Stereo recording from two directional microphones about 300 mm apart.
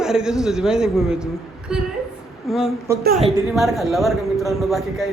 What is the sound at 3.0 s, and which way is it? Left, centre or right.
Speech, right.